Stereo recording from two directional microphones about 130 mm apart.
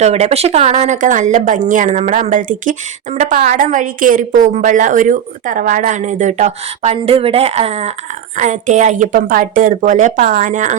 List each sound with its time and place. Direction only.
0.0 s speech: 55° right (ahead or behind)
8.4 s a woman's voice: 75° right (ahead or behind)